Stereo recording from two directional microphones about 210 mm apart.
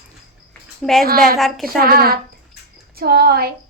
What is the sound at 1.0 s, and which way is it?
Child singing, 45° right (ahead or behind).